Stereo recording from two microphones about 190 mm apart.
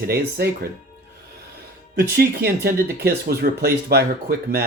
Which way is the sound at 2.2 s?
55° right (ahead or behind).